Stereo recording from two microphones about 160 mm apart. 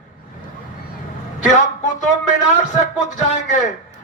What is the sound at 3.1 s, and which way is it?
Speech, 50° left (ahead or behind).